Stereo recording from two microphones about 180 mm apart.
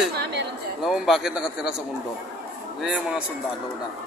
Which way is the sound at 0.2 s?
70° right (ahead or behind).